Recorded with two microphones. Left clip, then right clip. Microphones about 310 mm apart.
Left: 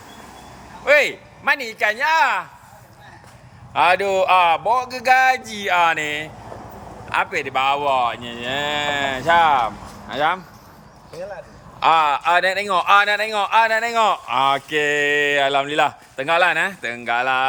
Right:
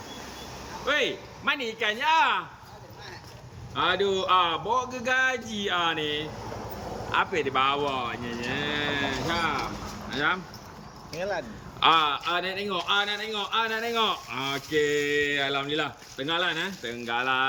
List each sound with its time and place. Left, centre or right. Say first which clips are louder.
0.9 s speech: left 11 dB; centre
4.1 s speech: left 8 dB; centre
11.8 s a man's voice: left 6 dB; centre
15.4 s speech: left 10 dB; left
15.6 s speech: left 10 dB; centre